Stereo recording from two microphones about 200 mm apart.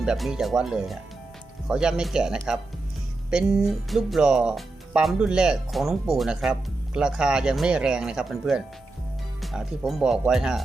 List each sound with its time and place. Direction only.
0.0 s speech: 5° right (ahead or behind)